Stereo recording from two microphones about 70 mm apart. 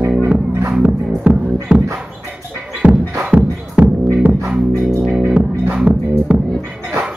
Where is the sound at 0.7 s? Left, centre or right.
Centre.